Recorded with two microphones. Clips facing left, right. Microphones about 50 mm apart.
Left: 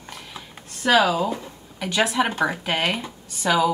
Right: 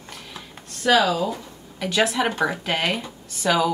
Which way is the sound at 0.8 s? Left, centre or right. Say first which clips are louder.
Even; centre.